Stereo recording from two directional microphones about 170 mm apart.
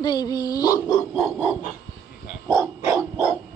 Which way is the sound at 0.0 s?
25° left (ahead or behind).